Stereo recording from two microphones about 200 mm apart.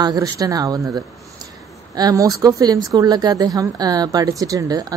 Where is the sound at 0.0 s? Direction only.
20° right (ahead or behind).